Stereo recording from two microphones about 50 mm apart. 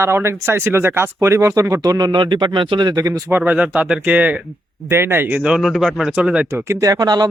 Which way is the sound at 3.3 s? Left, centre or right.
Right.